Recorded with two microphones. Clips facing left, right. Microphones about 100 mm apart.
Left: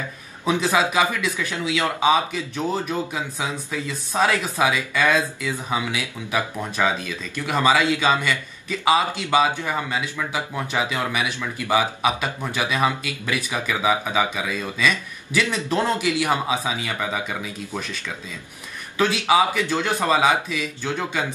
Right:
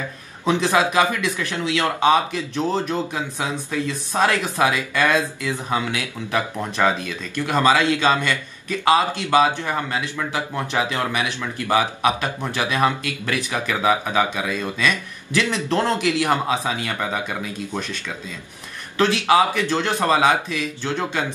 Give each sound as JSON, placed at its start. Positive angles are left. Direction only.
{"t": 0.5, "sound": "speech", "side_deg": 5}
{"t": 18.9, "sound": "speech", "side_deg": 5}